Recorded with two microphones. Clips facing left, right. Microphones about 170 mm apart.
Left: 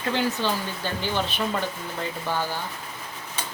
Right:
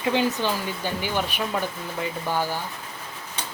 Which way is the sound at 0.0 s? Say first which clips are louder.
Right 2 dB; 15° right (ahead or behind).